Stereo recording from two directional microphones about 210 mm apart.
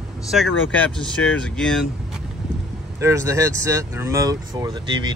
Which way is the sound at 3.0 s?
15° right (ahead or behind).